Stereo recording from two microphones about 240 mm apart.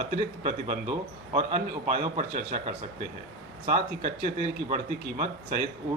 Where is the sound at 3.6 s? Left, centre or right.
Right.